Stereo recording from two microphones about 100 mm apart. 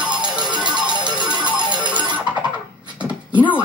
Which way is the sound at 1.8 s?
15° right (ahead or behind).